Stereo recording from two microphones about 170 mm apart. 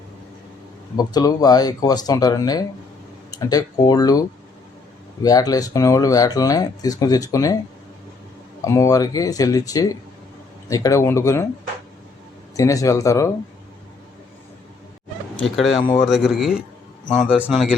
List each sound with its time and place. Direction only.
0.9 s speech: 20° left (ahead or behind)
8.6 s speech: 15° left (ahead or behind)
12.5 s speech: 20° left (ahead or behind)
15.5 s speech: centre (ahead or behind)